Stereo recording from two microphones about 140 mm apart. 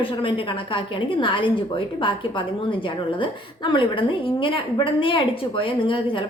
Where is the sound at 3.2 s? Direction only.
35° left (ahead or behind).